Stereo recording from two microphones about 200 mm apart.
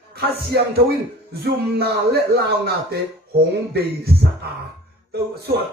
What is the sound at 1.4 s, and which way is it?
A man's voice, 55° right (ahead or behind).